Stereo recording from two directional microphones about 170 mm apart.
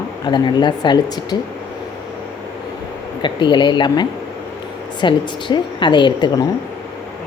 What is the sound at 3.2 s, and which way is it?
Speech, 25° left (ahead or behind).